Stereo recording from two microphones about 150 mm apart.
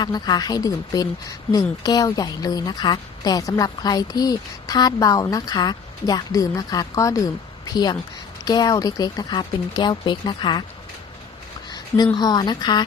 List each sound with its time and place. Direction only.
0.0 s a woman's voice: 30° left (ahead or behind)
12.1 s a woman's voice: 25° left (ahead or behind)